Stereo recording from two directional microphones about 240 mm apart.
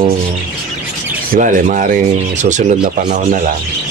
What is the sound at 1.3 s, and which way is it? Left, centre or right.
Speech, right.